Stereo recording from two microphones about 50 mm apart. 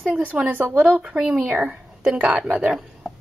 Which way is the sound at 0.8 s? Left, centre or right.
Right.